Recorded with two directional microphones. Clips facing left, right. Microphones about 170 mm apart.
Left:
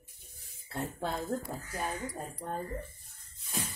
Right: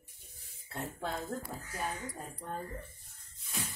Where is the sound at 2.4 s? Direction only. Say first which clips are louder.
Left 3 dB; 45° left (ahead or behind).